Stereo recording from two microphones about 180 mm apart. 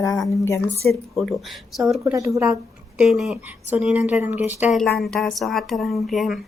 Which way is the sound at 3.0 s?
Centre (ahead or behind).